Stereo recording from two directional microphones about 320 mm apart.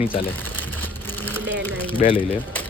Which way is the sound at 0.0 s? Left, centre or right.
Centre.